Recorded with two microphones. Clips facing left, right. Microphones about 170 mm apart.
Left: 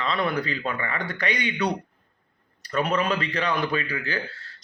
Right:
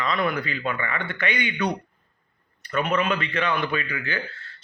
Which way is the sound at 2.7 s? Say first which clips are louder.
Even; 35° left (ahead or behind).